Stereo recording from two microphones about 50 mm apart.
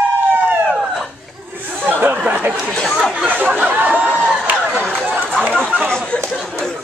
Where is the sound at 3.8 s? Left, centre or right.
Right.